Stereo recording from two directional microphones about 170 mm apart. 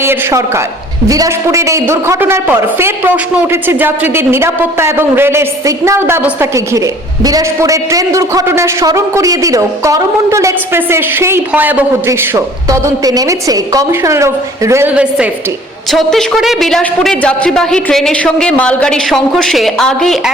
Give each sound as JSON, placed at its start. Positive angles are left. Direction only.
{"t": 0.0, "sound": "a man's voice", "side_deg": -15}